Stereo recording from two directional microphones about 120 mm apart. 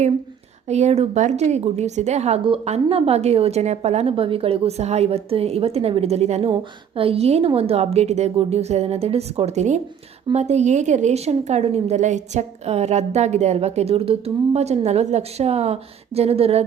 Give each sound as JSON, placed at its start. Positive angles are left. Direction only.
{"t": 0.7, "sound": "speech", "side_deg": -65}
{"t": 2.4, "sound": "a woman's voice", "side_deg": -55}
{"t": 4.1, "sound": "a woman's voice", "side_deg": -50}
{"t": 6.5, "sound": "a woman's voice", "side_deg": -50}